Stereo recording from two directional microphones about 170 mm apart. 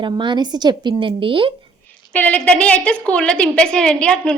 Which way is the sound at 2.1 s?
10° left (ahead or behind).